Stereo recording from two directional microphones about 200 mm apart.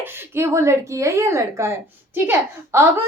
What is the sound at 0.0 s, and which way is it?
A woman's voice, 15° right (ahead or behind).